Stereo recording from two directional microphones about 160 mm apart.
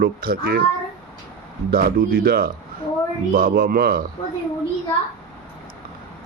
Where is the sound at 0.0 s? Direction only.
65° right (ahead or behind).